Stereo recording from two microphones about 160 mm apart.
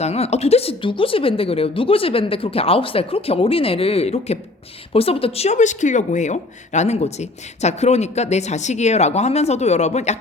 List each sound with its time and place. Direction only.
0.0 s speech: 40° left (ahead or behind)